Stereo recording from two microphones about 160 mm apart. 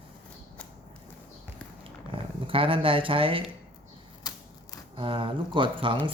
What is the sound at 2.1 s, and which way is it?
Speech, 35° right (ahead or behind).